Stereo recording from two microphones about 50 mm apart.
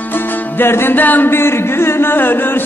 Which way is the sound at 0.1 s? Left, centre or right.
Left.